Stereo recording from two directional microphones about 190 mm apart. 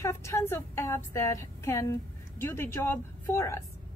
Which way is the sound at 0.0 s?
15° left (ahead or behind).